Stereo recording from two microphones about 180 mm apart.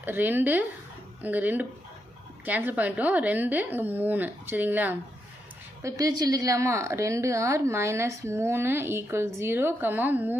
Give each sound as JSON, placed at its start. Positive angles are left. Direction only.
{"t": 0.0, "sound": "a woman's voice", "side_deg": -10}
{"t": 5.8, "sound": "a woman's voice", "side_deg": -20}